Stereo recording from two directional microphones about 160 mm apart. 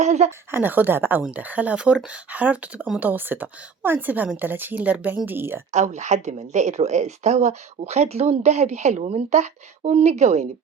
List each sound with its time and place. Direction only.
0.0 s a sound: 45° right (ahead or behind)
0.3 s speech: 10° right (ahead or behind)
5.7 s speech: 45° right (ahead or behind)